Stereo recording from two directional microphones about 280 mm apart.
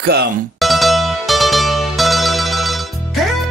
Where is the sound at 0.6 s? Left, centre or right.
Centre.